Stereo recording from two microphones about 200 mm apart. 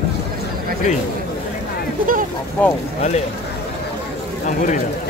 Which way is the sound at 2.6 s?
5° left (ahead or behind).